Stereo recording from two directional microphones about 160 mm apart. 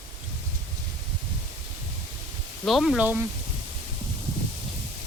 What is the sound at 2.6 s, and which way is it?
Speech, centre (ahead or behind).